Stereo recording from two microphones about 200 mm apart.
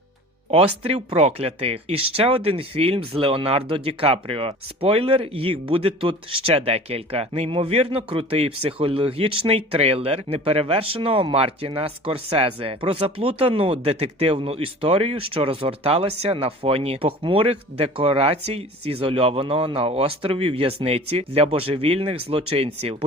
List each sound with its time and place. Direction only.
0.5 s speech: 30° right (ahead or behind)